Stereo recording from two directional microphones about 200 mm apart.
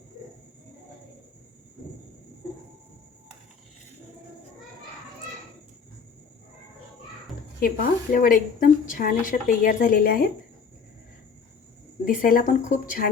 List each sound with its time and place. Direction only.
7.6 s a woman's voice: 45° left (ahead or behind)
12.0 s a woman's voice: 45° left (ahead or behind)